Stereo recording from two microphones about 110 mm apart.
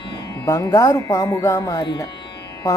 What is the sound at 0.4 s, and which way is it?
Speech, 30° left (ahead or behind).